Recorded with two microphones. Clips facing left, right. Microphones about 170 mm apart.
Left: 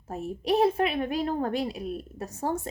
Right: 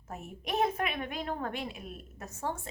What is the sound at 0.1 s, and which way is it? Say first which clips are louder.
A woman's voice: left 9 dB; 35° left (ahead or behind).